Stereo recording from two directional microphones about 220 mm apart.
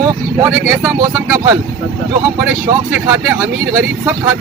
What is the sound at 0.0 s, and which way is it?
Speech, 10° right (ahead or behind).